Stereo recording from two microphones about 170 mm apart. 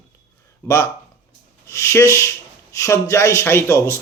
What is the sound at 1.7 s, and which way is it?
Speech, 15° left (ahead or behind).